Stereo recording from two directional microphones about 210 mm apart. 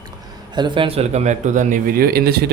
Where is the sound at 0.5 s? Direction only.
20° right (ahead or behind).